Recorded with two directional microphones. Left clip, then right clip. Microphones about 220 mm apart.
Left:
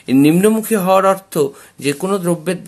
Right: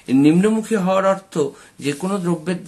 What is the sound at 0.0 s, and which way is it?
Speech, 45° left (ahead or behind).